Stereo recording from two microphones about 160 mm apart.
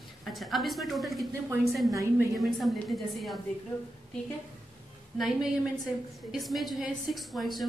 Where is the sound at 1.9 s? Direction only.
20° right (ahead or behind).